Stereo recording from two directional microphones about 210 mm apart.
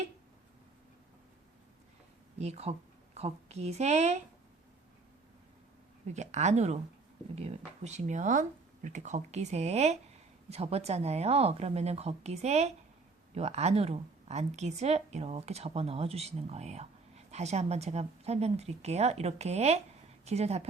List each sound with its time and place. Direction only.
2.4 s a woman's voice: 30° right (ahead or behind)
6.1 s a woman's voice: 35° right (ahead or behind)